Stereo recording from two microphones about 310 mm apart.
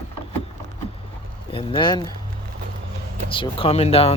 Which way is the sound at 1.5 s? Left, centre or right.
Centre.